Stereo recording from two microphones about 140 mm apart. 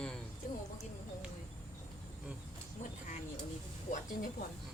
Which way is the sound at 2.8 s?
65° left (ahead or behind).